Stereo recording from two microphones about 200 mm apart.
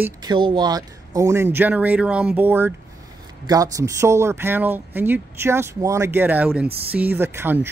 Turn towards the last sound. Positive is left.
turn(degrees=-10)  # may be behind; listen again after turning